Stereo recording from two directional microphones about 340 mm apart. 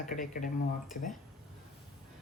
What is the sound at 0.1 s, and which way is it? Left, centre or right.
Speech, left.